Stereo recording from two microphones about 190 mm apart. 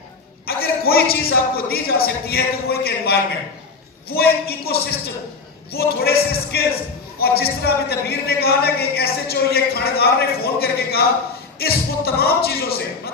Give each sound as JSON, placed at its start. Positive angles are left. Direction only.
{"t": 0.5, "sound": "a woman's voice", "side_deg": 55}